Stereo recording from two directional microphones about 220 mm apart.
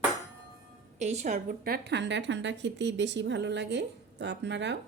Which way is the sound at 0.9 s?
30° right (ahead or behind).